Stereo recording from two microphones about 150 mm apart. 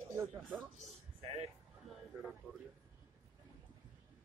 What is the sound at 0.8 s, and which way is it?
Speech, 45° right (ahead or behind).